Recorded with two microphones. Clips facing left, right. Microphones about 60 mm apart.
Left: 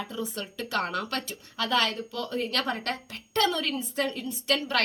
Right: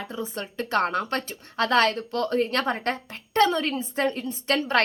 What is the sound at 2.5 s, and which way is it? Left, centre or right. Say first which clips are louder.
A woman's voice: right 4 dB; right.